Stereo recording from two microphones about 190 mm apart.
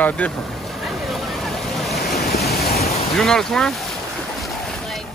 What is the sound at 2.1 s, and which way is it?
Waves, 55° left (ahead or behind).